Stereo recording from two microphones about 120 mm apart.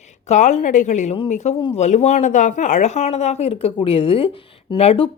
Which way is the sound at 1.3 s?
70° left (ahead or behind).